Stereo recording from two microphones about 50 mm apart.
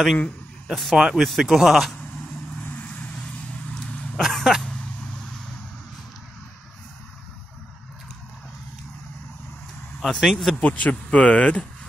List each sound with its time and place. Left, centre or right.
0.7 s speech: centre
0.9 s speech: centre
1.2 s speech: centre
2.6 s vehicle: left
4.2 s speech: centre
10.0 s speech: centre
10.6 s speech: left